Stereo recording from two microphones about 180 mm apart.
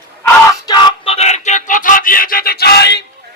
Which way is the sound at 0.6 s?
25° left (ahead or behind).